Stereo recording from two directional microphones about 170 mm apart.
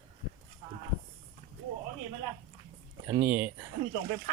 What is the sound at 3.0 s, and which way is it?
Speech, 15° right (ahead or behind).